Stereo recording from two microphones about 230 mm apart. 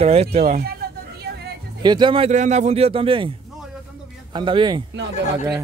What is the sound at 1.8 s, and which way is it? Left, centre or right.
A man's voice, centre.